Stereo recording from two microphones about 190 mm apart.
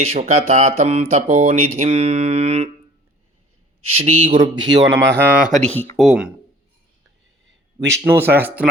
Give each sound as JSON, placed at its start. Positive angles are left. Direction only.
{"t": 0.0, "sound": "speech", "side_deg": -35}
{"t": 3.9, "sound": "speech", "side_deg": -30}
{"t": 5.2, "sound": "speech", "side_deg": -5}
{"t": 5.7, "sound": "speech", "side_deg": 10}
{"t": 6.0, "sound": "speech", "side_deg": -5}
{"t": 7.8, "sound": "speech", "side_deg": -10}